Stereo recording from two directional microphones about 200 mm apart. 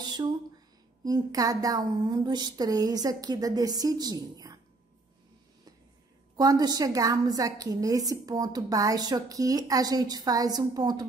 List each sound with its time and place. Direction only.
0.0 s a sound: 20° right (ahead or behind)
1.0 s a woman's voice: 20° right (ahead or behind)
6.3 s a woman's voice: 20° right (ahead or behind)